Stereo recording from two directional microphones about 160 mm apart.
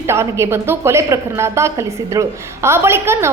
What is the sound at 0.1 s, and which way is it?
A woman's voice, 15° right (ahead or behind).